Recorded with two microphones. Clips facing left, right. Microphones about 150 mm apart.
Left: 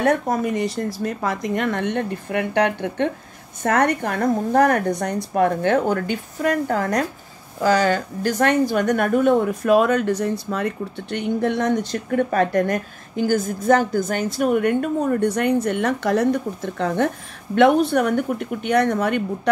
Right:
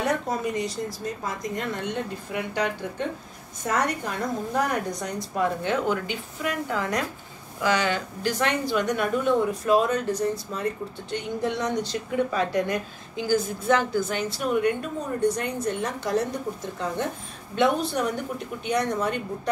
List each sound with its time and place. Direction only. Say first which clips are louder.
0.0 s a woman's voice: left 6 dB; 55° left (ahead or behind)
5.9 s a woman's voice: left 5 dB; 45° left (ahead or behind); by 19.5 s 65° left (ahead or behind)